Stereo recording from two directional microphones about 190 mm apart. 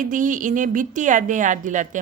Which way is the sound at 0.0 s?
45° right (ahead or behind).